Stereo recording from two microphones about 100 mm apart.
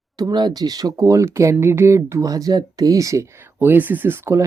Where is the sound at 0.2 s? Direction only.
45° right (ahead or behind).